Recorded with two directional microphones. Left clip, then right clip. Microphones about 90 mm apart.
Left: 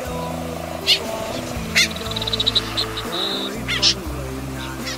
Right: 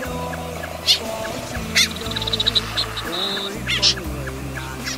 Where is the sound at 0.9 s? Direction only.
15° right (ahead or behind).